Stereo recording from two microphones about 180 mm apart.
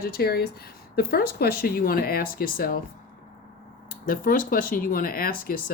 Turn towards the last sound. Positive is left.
turn(degrees=55)  # may be behind; listen again after turning